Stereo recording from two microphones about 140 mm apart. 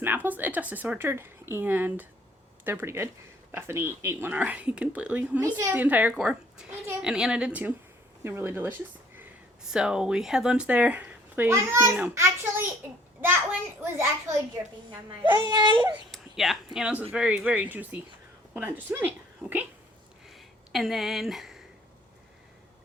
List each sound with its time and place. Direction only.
0.0 s speech: 15° right (ahead or behind)
5.4 s speech: 20° right (ahead or behind)
9.7 s speech: 5° right (ahead or behind)
14.8 s a child's voice: 35° right (ahead or behind)
16.1 s a woman's voice: centre (ahead or behind)
20.2 s a sound: centre (ahead or behind)